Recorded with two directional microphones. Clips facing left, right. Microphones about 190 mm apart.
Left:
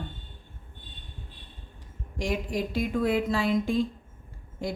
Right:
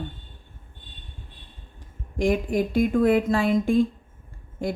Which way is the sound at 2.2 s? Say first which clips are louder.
Right 7 dB; 55° right (ahead or behind).